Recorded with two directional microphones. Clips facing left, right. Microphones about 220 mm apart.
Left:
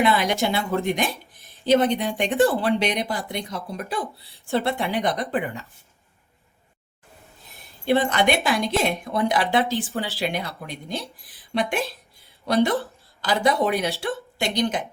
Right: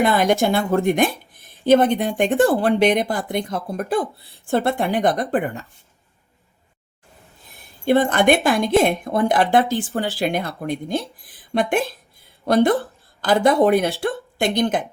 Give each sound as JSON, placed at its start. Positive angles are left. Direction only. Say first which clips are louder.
{"t": 0.0, "sound": "speech", "louder": "right 4 dB", "side_deg": -45}
{"t": 7.9, "sound": "a woman's voice", "louder": "right 4 dB", "side_deg": -50}